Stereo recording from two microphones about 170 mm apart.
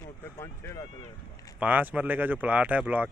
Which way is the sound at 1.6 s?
10° right (ahead or behind).